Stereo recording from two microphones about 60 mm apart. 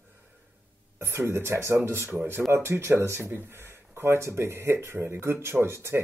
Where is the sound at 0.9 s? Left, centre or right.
Right.